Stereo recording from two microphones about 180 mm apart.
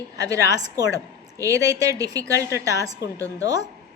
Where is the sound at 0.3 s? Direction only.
20° right (ahead or behind).